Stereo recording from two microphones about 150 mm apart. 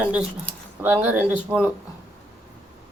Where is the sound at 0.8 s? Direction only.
15° right (ahead or behind).